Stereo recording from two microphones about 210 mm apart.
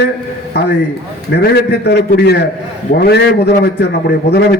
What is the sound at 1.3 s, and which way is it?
A man's voice, 50° left (ahead or behind).